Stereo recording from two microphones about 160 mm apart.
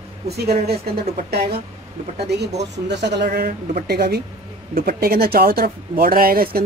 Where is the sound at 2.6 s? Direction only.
90° right.